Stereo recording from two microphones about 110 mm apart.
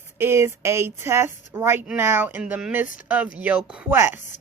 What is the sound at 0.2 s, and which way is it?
A woman's voice, 25° right (ahead or behind).